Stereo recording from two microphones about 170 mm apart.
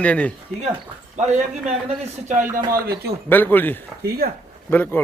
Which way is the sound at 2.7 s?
65° right (ahead or behind).